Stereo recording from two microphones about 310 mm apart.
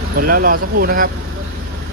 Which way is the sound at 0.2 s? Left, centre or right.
Right.